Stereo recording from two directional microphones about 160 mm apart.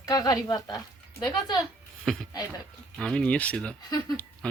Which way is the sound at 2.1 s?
5° left (ahead or behind).